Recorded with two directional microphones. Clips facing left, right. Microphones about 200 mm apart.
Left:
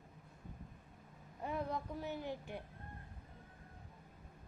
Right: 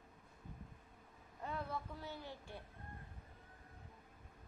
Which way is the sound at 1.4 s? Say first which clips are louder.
Left 4 dB; 15° left (ahead or behind).